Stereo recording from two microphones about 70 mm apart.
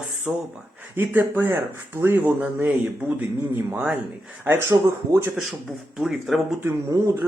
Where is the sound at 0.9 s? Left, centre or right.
Right.